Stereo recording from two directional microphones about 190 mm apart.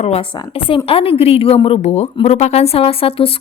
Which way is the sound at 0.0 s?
30° left (ahead or behind).